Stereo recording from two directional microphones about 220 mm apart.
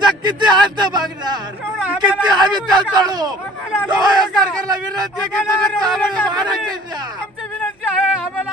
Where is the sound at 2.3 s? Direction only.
20° right (ahead or behind).